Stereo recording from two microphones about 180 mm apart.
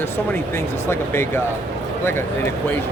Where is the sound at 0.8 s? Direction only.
15° left (ahead or behind).